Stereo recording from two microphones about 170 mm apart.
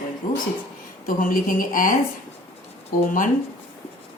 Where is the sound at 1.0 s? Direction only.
55° left (ahead or behind).